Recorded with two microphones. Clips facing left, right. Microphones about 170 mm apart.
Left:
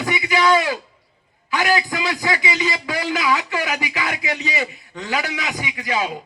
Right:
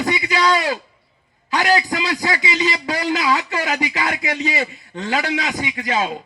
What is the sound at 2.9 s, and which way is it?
A man's voice, 45° right (ahead or behind).